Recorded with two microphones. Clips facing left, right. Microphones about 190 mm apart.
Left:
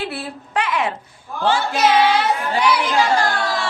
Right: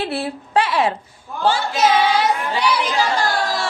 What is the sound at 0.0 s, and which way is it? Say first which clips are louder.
Speech: right 4 dB; 30° right (ahead or behind).